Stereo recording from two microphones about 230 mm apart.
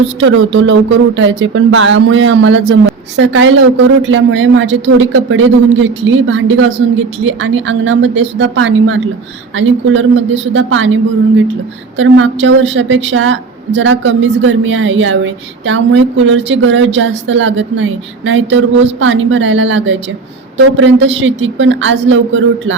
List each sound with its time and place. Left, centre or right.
0.0 s a woman's voice: right